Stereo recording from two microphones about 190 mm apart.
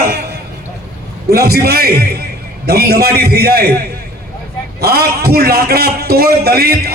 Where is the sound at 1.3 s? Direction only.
55° right (ahead or behind).